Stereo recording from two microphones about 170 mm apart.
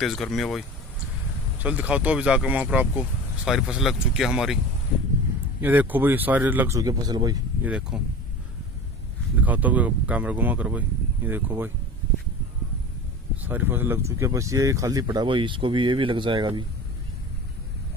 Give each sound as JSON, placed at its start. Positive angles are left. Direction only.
{"t": 0.0, "sound": "speech", "side_deg": 0}
{"t": 5.6, "sound": "speech", "side_deg": -10}
{"t": 7.6, "sound": "speech", "side_deg": -5}
{"t": 9.4, "sound": "speech", "side_deg": -10}
{"t": 13.4, "sound": "speech", "side_deg": -10}